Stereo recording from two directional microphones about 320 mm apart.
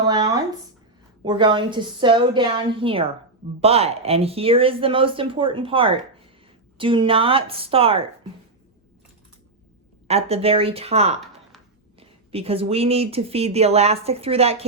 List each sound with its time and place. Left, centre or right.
0.1 s a sound: centre
1.2 s speech: centre
10.1 s speech: centre